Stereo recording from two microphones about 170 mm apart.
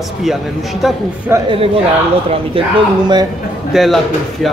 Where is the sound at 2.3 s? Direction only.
30° right (ahead or behind).